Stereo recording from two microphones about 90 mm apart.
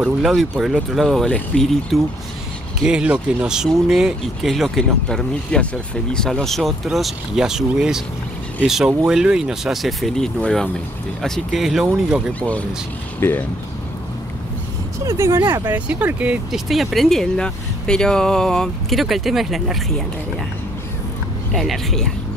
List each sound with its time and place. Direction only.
0.0 s speech: centre (ahead or behind)
2.8 s speech: 10° right (ahead or behind)
12.4 s speech: 15° left (ahead or behind)
15.0 s speech: 30° right (ahead or behind)
15.6 s speech: 20° right (ahead or behind)
16.5 s speech: centre (ahead or behind)
21.5 s speech: centre (ahead or behind)